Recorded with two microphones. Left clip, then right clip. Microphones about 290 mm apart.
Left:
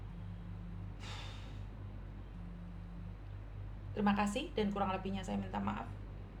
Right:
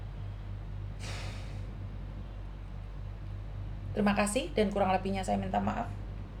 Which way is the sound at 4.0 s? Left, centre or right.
Centre.